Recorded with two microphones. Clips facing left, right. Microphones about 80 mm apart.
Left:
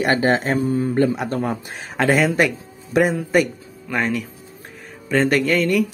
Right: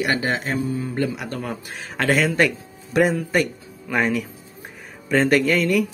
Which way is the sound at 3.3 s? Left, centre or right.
Centre.